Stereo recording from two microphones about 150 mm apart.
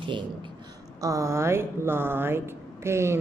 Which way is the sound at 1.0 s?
20° right (ahead or behind).